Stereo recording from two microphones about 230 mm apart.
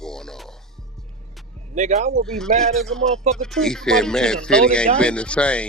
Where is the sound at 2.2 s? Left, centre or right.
Centre.